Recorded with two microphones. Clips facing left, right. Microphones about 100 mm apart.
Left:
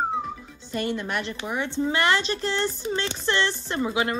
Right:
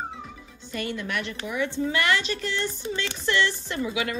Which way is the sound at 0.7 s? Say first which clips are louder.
Left 3 dB; 30° left (ahead or behind).